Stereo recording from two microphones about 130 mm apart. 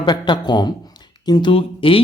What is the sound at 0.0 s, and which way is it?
Speech, 35° left (ahead or behind).